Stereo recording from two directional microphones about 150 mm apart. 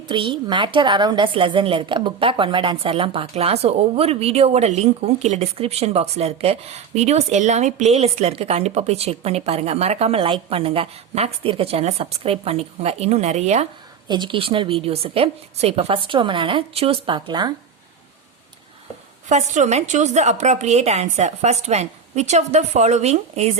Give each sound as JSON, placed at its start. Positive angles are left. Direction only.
{"t": 0.1, "sound": "a woman's voice", "side_deg": -35}
{"t": 14.1, "sound": "a woman's voice", "side_deg": -30}
{"t": 19.3, "sound": "a woman's voice", "side_deg": -50}